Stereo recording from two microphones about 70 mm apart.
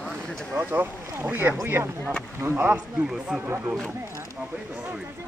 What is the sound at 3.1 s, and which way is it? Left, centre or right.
Speech, centre.